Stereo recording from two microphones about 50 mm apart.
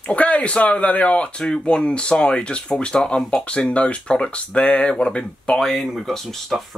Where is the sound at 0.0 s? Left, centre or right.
Left.